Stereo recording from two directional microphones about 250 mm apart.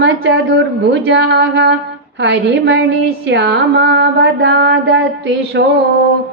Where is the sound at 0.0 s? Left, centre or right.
Right.